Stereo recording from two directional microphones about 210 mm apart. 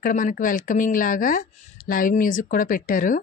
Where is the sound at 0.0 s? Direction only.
40° left (ahead or behind).